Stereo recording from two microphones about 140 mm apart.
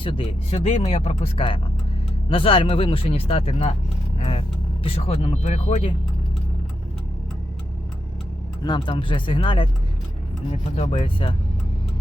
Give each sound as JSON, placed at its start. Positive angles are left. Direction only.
{"t": 0.0, "sound": "speech", "side_deg": 40}
{"t": 8.6, "sound": "speech", "side_deg": 35}
{"t": 10.5, "sound": "speech", "side_deg": 50}